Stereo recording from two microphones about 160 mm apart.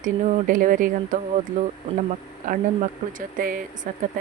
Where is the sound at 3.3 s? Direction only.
60° right (ahead or behind).